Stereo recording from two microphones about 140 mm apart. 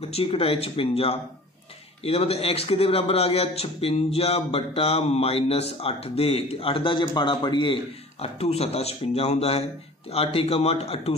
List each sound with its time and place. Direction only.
0.1 s a man's voice: 45° left (ahead or behind)